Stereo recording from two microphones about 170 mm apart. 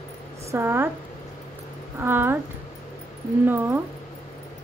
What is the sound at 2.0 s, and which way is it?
Speech, 10° right (ahead or behind).